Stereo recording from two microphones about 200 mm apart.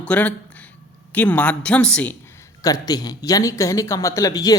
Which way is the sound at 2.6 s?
20° left (ahead or behind).